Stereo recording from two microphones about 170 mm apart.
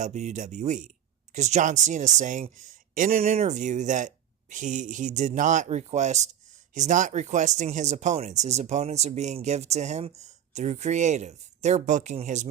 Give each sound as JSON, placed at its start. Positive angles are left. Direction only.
{"t": 0.0, "sound": "speech", "side_deg": -45}